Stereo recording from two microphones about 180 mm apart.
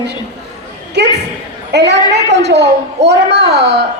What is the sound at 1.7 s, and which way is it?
A woman's voice, 70° right (ahead or behind).